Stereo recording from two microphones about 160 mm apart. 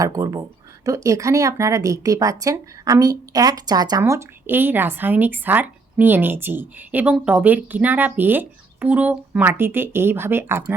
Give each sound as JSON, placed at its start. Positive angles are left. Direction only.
{"t": 0.0, "sound": "a woman's voice", "side_deg": -20}